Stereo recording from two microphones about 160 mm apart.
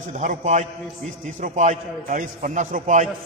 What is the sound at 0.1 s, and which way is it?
A man's voice, 50° right (ahead or behind).